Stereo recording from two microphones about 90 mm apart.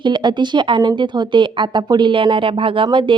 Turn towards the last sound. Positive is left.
turn(degrees=-65)  # may be behind; listen again after turning